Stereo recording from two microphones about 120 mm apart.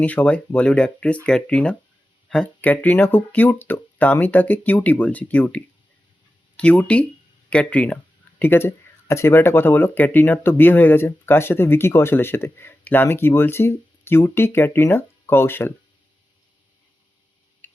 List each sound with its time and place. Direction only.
0.0 s speech: 10° left (ahead or behind)
17.6 s tick-tock: 15° left (ahead or behind)